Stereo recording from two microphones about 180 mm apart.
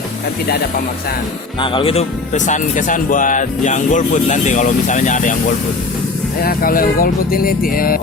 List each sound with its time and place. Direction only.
1.5 s speech: 30° left (ahead or behind); by 5.4 s 45° left (ahead or behind)
6.4 s speech: 55° left (ahead or behind)